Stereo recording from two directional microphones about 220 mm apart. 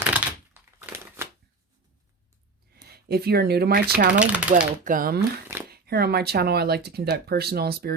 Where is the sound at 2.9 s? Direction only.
45° right (ahead or behind).